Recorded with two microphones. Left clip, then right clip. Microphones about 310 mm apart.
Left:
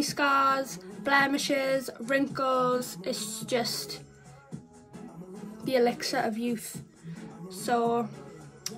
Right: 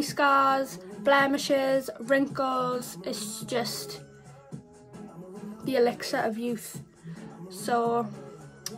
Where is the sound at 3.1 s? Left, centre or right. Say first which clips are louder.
Left 1 dB; centre.